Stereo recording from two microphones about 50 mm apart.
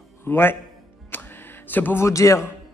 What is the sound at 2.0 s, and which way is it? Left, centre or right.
Speech, left.